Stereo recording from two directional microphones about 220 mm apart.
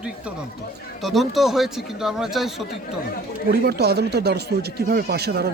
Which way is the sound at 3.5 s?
45° right (ahead or behind).